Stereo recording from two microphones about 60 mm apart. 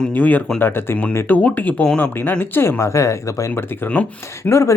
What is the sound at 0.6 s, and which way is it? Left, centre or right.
Speech, left.